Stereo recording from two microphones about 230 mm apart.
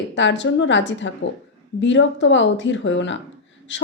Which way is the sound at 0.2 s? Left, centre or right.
Left.